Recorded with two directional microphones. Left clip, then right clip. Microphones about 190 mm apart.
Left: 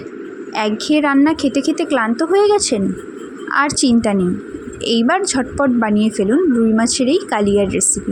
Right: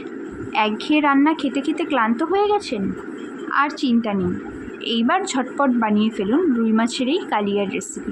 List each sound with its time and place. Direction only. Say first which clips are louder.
0.5 s a woman's voice: left 2 dB; 35° left (ahead or behind)